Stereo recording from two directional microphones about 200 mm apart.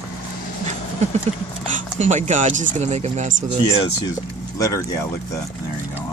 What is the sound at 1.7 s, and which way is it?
Speech, 35° right (ahead or behind).